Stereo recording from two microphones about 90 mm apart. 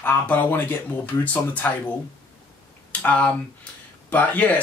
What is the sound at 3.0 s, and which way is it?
Speech, 15° left (ahead or behind).